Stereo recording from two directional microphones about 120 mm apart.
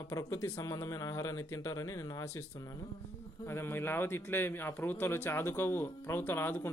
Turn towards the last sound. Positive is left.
turn(degrees=20)  # may be behind; listen again after turning